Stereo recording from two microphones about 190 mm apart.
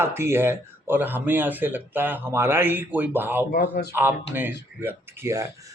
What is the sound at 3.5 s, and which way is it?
Speech, 55° left (ahead or behind).